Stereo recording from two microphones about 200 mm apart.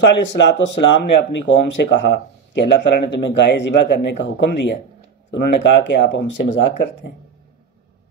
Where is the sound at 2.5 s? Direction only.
60° left (ahead or behind).